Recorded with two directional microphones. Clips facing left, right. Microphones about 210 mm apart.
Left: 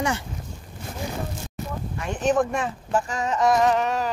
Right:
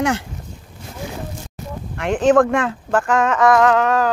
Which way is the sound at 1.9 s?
80° right.